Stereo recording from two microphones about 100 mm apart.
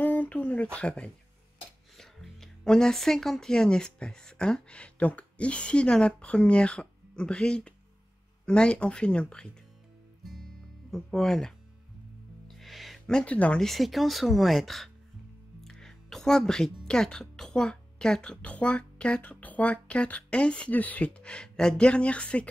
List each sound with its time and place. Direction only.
0.0 s a sound: 15° left (ahead or behind)
0.7 s speech: 10° left (ahead or behind)
10.9 s speech: 5° left (ahead or behind)